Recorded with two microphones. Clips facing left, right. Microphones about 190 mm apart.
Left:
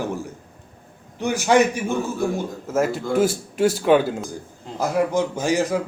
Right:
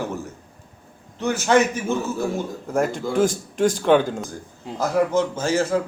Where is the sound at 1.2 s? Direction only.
15° left (ahead or behind).